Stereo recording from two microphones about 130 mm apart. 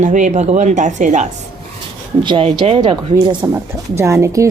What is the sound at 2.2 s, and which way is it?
Speech, 40° right (ahead or behind).